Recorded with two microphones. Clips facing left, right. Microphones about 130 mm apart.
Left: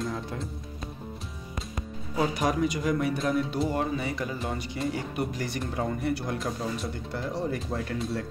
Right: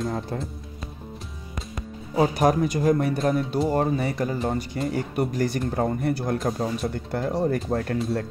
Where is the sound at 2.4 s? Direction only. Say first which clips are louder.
Right 5 dB; 45° right (ahead or behind).